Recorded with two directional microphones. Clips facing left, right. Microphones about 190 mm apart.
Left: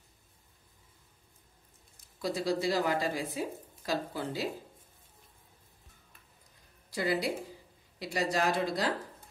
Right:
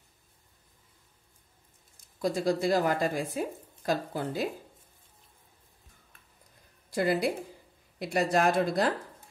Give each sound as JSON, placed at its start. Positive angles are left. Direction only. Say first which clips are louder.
{"t": 2.2, "sound": "speech", "louder": "right 4 dB", "side_deg": -50}
{"t": 6.9, "sound": "speech", "louder": "right 4 dB", "side_deg": -50}